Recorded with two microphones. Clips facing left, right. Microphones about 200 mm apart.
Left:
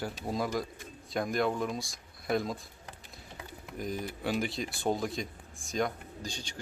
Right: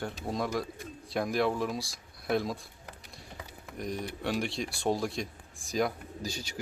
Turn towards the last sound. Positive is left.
turn(degrees=-10)  # may be behind; listen again after turning